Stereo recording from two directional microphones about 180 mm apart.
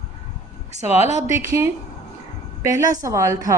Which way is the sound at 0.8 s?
40° left (ahead or behind).